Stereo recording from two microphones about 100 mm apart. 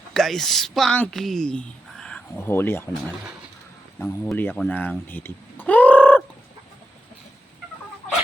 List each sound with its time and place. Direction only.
0.1 s a woman's voice: 5° left (ahead or behind)
2.4 s speech: 25° left (ahead or behind)
4.0 s speech: 20° left (ahead or behind)
4.7 s fowl: 20° left (ahead or behind)